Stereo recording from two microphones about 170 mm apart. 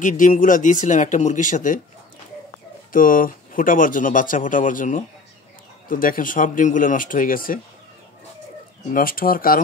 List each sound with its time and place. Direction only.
0.0 s speech: 50° left (ahead or behind)
2.9 s speech: 55° left (ahead or behind)
8.9 s speech: 55° left (ahead or behind)